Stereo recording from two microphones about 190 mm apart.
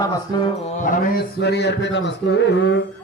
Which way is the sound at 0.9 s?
55° left (ahead or behind).